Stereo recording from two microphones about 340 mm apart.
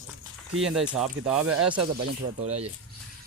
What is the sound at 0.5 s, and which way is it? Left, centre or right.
Speech, centre.